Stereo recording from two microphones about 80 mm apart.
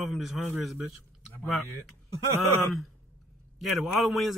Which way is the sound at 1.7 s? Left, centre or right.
Right.